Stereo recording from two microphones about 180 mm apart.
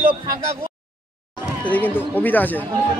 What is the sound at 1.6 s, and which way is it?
A man's voice, 10° left (ahead or behind).